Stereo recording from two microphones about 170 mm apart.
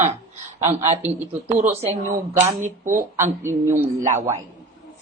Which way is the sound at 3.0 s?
15° right (ahead or behind).